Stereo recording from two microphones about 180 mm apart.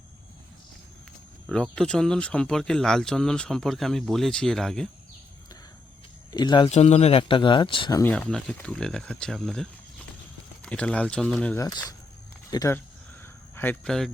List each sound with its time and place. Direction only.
1.5 s speech: 5° left (ahead or behind)
6.3 s speech: 25° left (ahead or behind)
6.7 s speech: 35° left (ahead or behind)
8.0 s speech: 5° left (ahead or behind)
11.5 s speech: 20° left (ahead or behind)
13.2 s a sound: 10° left (ahead or behind)